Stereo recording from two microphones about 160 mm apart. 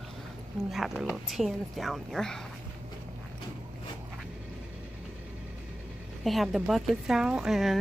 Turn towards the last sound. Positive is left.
turn(degrees=0)  # may be behind; listen again after turning